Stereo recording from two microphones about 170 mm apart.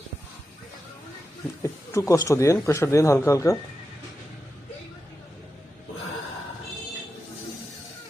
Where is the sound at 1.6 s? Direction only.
15° left (ahead or behind).